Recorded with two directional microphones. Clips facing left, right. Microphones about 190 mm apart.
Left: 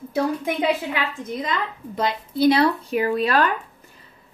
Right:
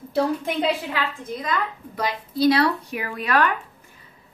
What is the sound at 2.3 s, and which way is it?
Speech, 20° left (ahead or behind).